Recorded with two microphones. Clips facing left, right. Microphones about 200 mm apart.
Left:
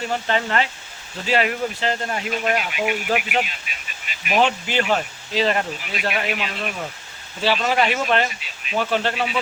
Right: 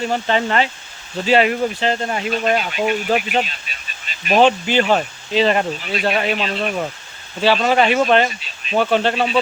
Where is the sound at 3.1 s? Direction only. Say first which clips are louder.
Right 4 dB; 30° right (ahead or behind).